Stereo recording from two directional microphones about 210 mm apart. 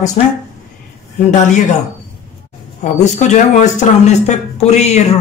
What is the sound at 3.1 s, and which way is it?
Speech, 35° left (ahead or behind).